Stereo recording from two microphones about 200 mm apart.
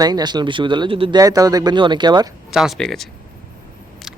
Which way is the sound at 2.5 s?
Centre (ahead or behind).